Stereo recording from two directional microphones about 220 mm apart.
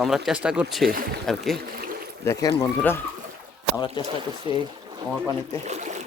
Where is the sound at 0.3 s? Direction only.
5° right (ahead or behind).